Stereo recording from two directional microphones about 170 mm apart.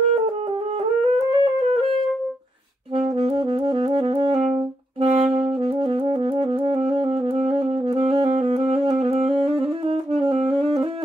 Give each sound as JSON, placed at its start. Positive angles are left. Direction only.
{"t": 1.1, "sound": "music", "side_deg": -35}
{"t": 3.0, "sound": "saxophone", "side_deg": -35}